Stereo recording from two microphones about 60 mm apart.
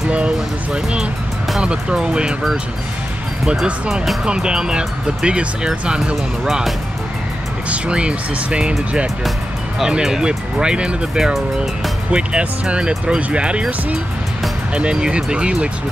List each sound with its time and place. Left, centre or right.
0.7 s speech: centre
3.9 s speech: centre
4.2 s speech: centre
6.4 s speech: centre
7.7 s speech: centre
9.8 s speech: centre
11.3 s speech: centre
12.1 s speech: centre